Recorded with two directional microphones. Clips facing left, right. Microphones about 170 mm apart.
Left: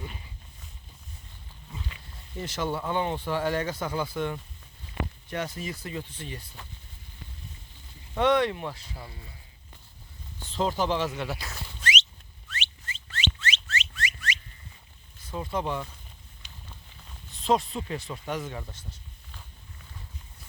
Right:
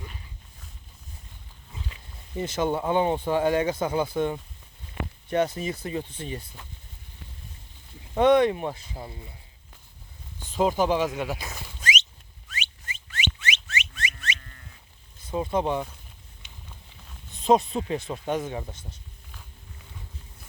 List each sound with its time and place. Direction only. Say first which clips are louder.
2.3 s speech: right 5 dB; 20° right (ahead or behind)
8.2 s speech: right 5 dB; 20° right (ahead or behind)
10.5 s speech: right 4 dB; 15° right (ahead or behind)
12.5 s a sound: right 1 dB; 15° right (ahead or behind)
15.3 s speech: right 5 dB; 20° right (ahead or behind)
17.4 s speech: right 5 dB; 20° right (ahead or behind)